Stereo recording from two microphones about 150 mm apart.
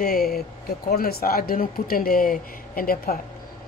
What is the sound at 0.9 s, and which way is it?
Speech, 90° left.